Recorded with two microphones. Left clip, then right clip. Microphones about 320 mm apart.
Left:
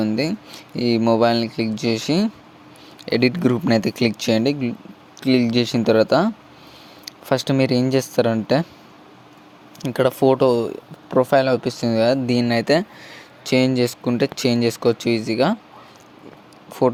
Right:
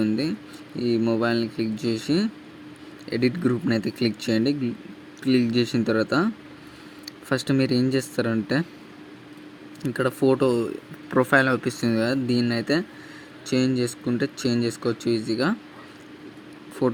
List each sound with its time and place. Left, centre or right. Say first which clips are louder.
0.0 s a sound: left 3 dB; centre
0.8 s speech: left 6 dB; left
9.8 s speech: left 5 dB; centre
16.8 s speech: left 6 dB; centre